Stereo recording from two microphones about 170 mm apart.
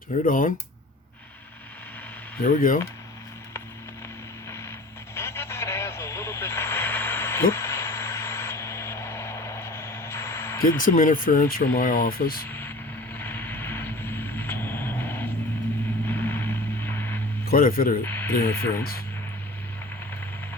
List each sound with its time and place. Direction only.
0.3 s speech: 55° left (ahead or behind)
2.4 s speech: 55° left (ahead or behind)
5.1 s vehicle: 15° left (ahead or behind)
10.8 s speech: 55° left (ahead or behind)
12.5 s vehicle: 10° left (ahead or behind)
17.5 s speech: 60° left (ahead or behind)
18.0 s speech: 10° left (ahead or behind)